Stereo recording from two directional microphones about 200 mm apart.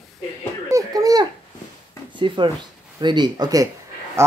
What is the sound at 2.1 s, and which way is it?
Speech, 25° right (ahead or behind).